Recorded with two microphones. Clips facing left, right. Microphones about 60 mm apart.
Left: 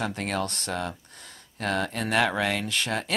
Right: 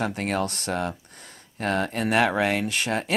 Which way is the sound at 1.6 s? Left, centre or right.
Centre.